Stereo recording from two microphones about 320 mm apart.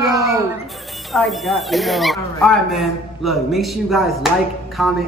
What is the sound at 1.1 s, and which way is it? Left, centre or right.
Speech, centre.